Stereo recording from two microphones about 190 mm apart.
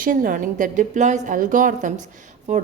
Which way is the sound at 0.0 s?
45° right (ahead or behind).